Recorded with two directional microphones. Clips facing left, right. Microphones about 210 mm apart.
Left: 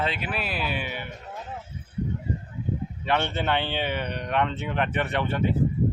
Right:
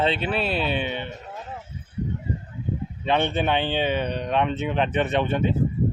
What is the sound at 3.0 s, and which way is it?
A man's voice, 20° right (ahead or behind).